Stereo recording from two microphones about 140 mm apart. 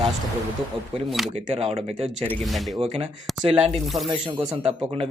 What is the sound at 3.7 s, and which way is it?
Speech, centre (ahead or behind).